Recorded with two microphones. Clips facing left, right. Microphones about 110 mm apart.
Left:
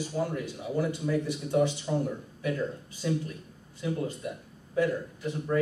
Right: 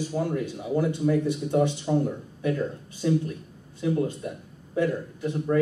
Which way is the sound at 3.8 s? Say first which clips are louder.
Right 6 dB; 20° right (ahead or behind).